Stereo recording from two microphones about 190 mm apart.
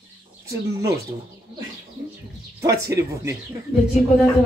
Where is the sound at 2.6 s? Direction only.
15° right (ahead or behind).